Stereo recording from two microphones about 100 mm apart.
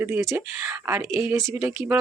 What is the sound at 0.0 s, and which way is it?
Speech, 25° right (ahead or behind).